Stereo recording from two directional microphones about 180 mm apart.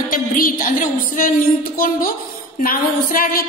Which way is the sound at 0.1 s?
50° left (ahead or behind).